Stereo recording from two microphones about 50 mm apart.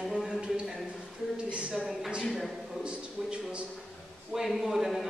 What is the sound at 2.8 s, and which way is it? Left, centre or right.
Speech, right.